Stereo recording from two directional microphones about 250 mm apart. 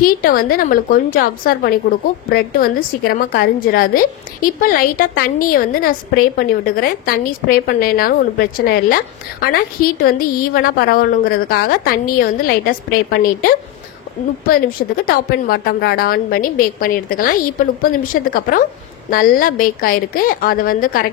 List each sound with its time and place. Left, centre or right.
0.2 s a woman's voice: left
14.5 s a woman's voice: left